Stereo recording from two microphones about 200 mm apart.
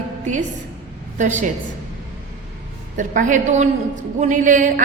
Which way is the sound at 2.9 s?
40° right (ahead or behind).